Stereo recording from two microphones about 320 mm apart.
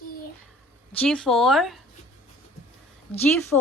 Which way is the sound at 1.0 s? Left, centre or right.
Centre.